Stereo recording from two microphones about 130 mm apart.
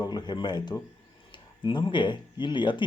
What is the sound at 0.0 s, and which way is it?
Speech, 35° left (ahead or behind).